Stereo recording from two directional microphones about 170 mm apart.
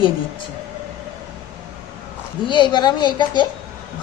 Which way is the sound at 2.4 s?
25° left (ahead or behind).